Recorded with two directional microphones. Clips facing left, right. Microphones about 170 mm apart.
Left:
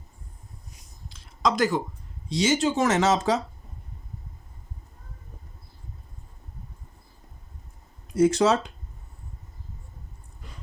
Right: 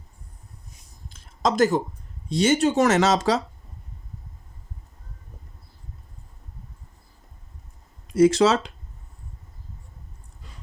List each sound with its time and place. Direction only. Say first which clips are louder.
1.1 s a sound: right 2 dB; 45° right (ahead or behind)
2.3 s speech: right 3 dB; 60° right (ahead or behind); by 3.4 s 85° right
8.0 s speech: right 3 dB; 90° right